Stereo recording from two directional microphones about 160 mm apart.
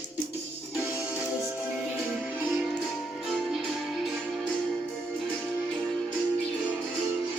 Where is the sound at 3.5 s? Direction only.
Centre (ahead or behind).